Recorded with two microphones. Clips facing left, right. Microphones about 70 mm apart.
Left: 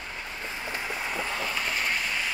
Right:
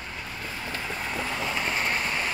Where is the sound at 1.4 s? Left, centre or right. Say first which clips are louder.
Right 2 dB; right.